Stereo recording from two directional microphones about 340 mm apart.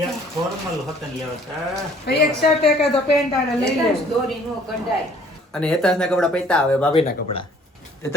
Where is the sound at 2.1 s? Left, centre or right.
Left.